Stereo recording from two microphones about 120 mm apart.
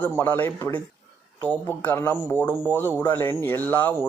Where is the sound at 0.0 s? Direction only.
15° left (ahead or behind).